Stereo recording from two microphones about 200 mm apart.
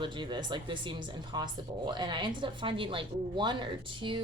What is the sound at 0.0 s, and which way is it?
Speech, 25° right (ahead or behind).